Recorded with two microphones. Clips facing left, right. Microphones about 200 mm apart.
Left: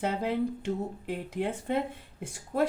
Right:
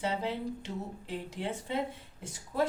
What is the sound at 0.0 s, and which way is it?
A woman's voice, 55° left (ahead or behind).